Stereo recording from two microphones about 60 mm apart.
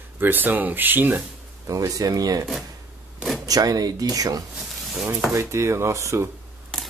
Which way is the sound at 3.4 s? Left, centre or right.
Right.